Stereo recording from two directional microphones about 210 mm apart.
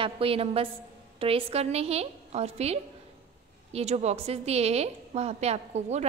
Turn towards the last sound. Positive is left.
turn(degrees=-30)  # may be behind; listen again after turning